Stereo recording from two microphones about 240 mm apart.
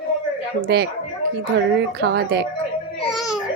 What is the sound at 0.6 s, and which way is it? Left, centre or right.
Speech, right.